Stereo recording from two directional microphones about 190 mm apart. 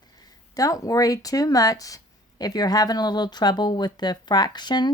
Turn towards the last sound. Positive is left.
turn(degrees=20)  # may be behind; listen again after turning